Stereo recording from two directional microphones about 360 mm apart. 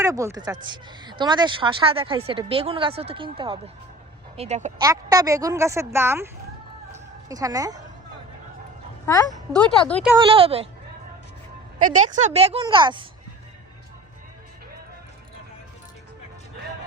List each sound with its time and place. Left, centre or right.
0.0 s speech: centre
7.3 s speech: centre
9.0 s a woman's voice: centre
10.2 s speech: centre
11.9 s speech: centre